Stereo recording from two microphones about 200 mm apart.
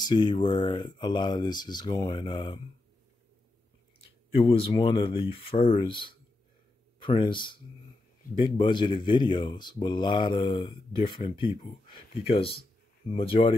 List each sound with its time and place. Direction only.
0.0 s speech: 20° left (ahead or behind)
4.4 s speech: 25° left (ahead or behind)